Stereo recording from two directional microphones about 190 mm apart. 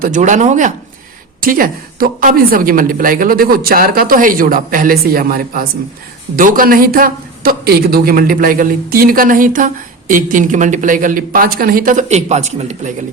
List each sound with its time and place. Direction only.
0.0 s speech: 40° right (ahead or behind)